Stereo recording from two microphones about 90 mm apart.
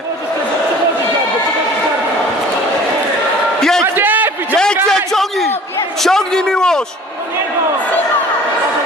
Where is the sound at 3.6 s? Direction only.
5° left (ahead or behind).